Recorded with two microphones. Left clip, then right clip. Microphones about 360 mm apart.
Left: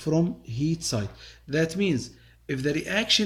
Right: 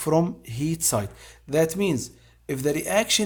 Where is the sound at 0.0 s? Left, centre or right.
Right.